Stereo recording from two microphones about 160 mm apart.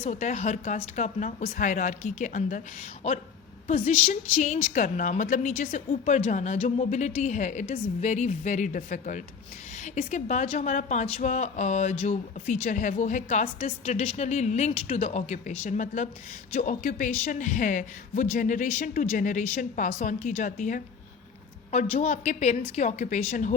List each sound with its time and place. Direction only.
0.0 s speech: 45° left (ahead or behind)